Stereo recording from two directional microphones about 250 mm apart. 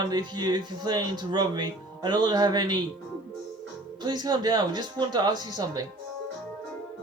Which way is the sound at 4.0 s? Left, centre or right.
Centre.